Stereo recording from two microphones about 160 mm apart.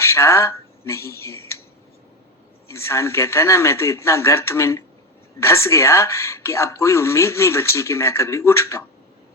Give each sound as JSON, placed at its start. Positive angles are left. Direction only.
{"t": 0.0, "sound": "speech", "side_deg": 15}
{"t": 2.6, "sound": "speech", "side_deg": 15}